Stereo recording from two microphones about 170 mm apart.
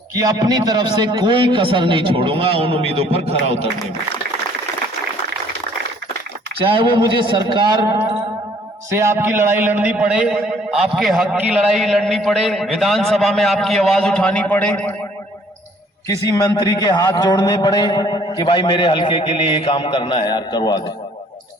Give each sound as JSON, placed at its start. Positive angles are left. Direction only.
{"t": 0.2, "sound": "a man's voice", "side_deg": -25}
{"t": 6.7, "sound": "a man's voice", "side_deg": -30}
{"t": 16.0, "sound": "a man's voice", "side_deg": 20}